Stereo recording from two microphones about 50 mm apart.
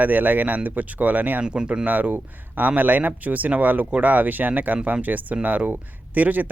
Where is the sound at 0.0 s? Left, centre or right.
Right.